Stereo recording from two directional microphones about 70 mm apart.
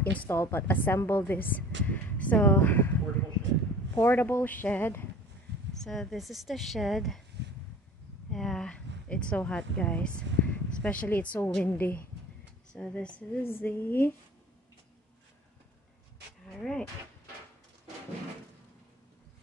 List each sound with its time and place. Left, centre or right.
0.0 s a woman's voice: centre
0.3 s speech: left
5.7 s speech: centre
8.3 s a sound: centre; by 11.5 s left
11.6 s a woman's voice: left
12.7 s speech: centre
13.4 s speech: left
16.4 s a sound: centre